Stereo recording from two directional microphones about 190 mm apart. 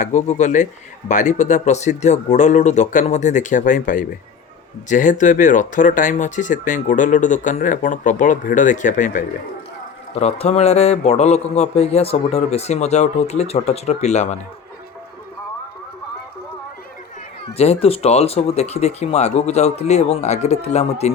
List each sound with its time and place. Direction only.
0.0 s speech: 40° left (ahead or behind)
17.4 s speech: 30° left (ahead or behind)